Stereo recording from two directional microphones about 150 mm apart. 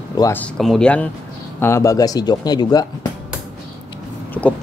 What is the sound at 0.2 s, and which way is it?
Speech, 15° left (ahead or behind).